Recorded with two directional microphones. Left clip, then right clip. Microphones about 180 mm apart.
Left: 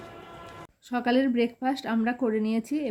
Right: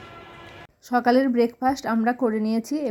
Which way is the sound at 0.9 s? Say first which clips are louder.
Right 6 dB; 20° right (ahead or behind).